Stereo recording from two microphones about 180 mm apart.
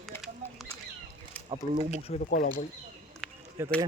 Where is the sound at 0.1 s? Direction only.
15° left (ahead or behind).